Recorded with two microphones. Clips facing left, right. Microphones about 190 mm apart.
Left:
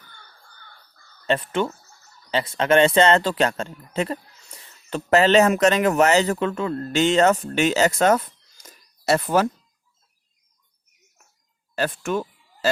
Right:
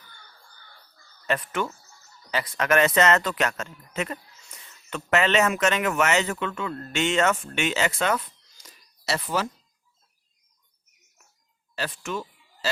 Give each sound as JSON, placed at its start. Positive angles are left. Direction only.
{"t": 1.3, "sound": "speech", "side_deg": 30}
{"t": 11.7, "sound": "speech", "side_deg": 50}